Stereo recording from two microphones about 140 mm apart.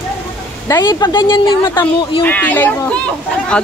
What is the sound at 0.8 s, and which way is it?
Speech, 30° left (ahead or behind).